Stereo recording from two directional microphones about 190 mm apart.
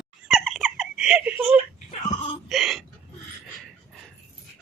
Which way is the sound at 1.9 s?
25° left (ahead or behind).